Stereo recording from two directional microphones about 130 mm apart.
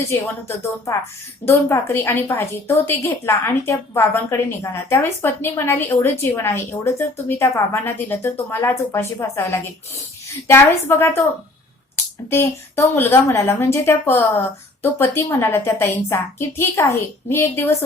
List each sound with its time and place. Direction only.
0.1 s a woman's voice: 20° left (ahead or behind)
12.3 s a woman's voice: 20° left (ahead or behind)